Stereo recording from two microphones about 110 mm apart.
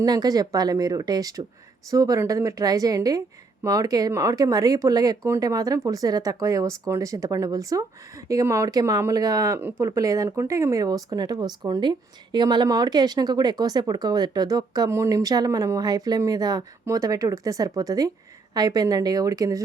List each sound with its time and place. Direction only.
0.0 s a woman's voice: 35° right (ahead or behind)
9.6 s a woman's voice: 20° right (ahead or behind)
14.8 s a woman's voice: 25° right (ahead or behind)